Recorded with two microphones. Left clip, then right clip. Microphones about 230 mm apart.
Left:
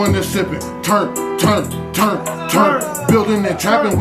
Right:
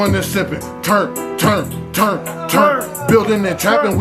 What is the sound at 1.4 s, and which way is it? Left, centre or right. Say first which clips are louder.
Speech: right 1 dB; right.